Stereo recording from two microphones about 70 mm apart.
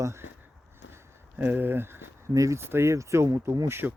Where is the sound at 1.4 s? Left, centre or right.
Right.